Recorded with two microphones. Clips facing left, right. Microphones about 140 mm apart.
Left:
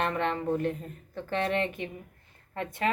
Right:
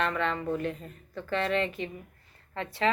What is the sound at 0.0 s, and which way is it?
A woman's voice, 55° left (ahead or behind).